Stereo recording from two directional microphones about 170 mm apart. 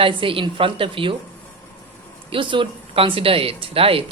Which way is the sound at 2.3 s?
30° right (ahead or behind).